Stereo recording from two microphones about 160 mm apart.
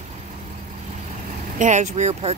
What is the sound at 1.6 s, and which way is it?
Speech, 50° right (ahead or behind).